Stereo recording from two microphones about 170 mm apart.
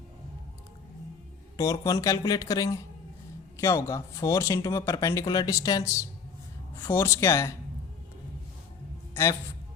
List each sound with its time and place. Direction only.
1.5 s speech: 20° left (ahead or behind)